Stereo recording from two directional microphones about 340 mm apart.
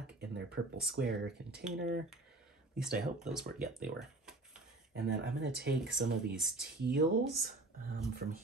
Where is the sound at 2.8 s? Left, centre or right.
Centre.